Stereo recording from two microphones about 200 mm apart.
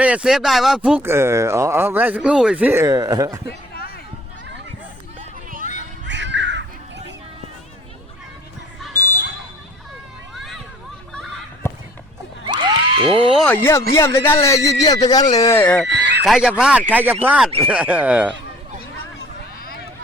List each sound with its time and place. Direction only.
0.0 s speech: 5° right (ahead or behind)
6.1 s crow: 60° right (ahead or behind)
8.9 s smoke detector: 10° left (ahead or behind)
10.3 s a sound: centre (ahead or behind)
12.5 s a sound: 25° right (ahead or behind)
13.3 s speech: 5° left (ahead or behind)
15.6 s speech: 5° left (ahead or behind)
15.9 s a sound: 55° right (ahead or behind)
16.2 s speech: centre (ahead or behind)